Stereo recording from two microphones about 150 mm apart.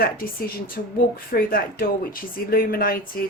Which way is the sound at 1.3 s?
80° left.